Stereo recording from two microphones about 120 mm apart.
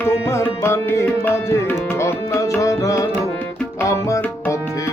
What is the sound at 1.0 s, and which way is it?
Tabla, 20° left (ahead or behind).